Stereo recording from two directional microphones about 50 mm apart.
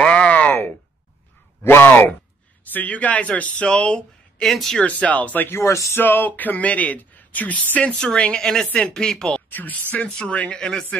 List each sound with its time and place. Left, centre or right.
0.0 s a sound: left
1.6 s speech: left
4.4 s speech: centre
5.0 s speech: left
5.5 s speech: left
5.9 s speech: left
8.0 s a woman's voice: centre
9.5 s a woman's voice: left; by 10.9 s centre